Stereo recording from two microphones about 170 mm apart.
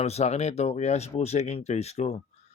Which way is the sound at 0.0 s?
40° left (ahead or behind).